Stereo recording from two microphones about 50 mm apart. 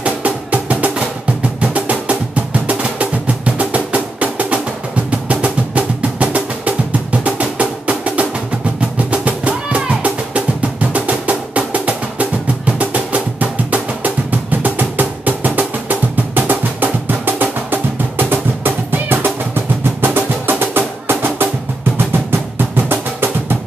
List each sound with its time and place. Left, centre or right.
0.0 s music: right
22.8 s music: right